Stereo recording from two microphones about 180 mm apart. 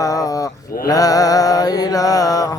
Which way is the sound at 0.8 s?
20° left (ahead or behind).